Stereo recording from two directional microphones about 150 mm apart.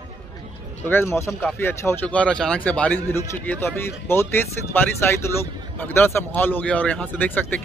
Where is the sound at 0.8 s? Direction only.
15° left (ahead or behind).